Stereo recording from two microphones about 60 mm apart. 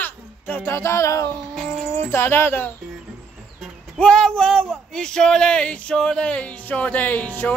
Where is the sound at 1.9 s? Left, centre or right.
Left.